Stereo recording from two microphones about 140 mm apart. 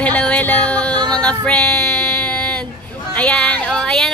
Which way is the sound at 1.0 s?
5° left (ahead or behind).